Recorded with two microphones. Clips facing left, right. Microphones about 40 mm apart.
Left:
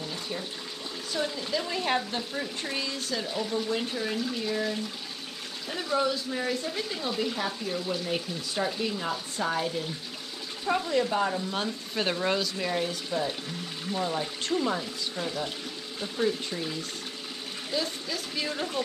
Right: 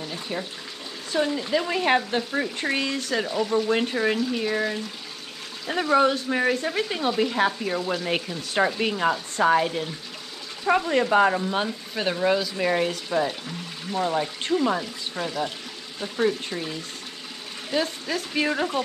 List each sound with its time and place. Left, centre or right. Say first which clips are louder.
0.1 s water tap: right 4 dB; right
1.1 s speech: right 7 dB; right
11.5 s speech: right 5 dB; right
12.0 s speech: right 5 dB; centre
12.5 s speech: right 6 dB; right
17.6 s speech: right 6 dB; right